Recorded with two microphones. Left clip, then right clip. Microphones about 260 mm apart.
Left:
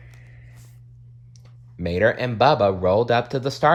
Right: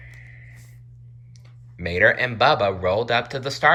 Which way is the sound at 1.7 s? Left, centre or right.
Centre.